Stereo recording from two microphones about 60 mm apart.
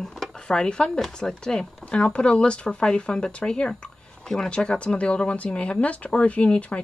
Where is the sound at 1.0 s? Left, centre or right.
Centre.